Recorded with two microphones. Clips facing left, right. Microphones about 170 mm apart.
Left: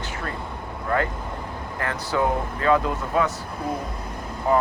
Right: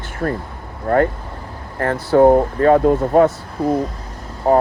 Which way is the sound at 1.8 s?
50° right (ahead or behind).